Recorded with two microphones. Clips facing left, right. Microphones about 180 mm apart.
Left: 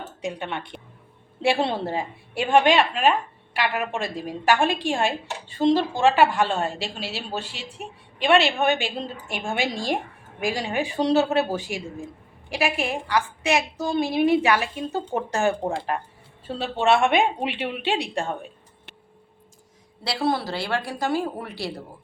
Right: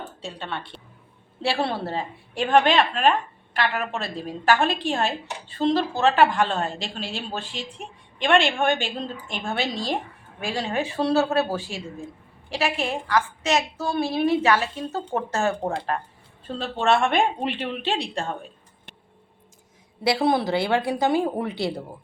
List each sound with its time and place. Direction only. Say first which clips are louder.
0.2 s a woman's voice: left 5 dB; 15° left (ahead or behind)
20.1 s speech: right 4 dB; 20° right (ahead or behind)